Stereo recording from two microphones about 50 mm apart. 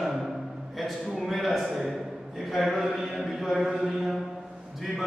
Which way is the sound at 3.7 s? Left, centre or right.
Centre.